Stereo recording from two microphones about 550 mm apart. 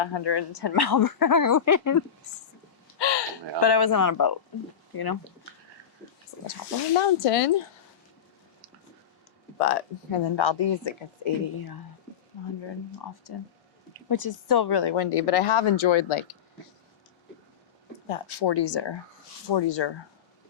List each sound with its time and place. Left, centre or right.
0.0 s speech: left
3.0 s a sound: left
3.6 s speech: left
6.5 s speech: left
9.6 s speech: left
10.2 s speech: left
13.3 s speech: left
14.9 s speech: left
18.1 s speech: left